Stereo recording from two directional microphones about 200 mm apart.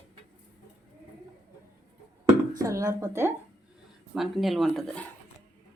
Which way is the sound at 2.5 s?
15° right (ahead or behind).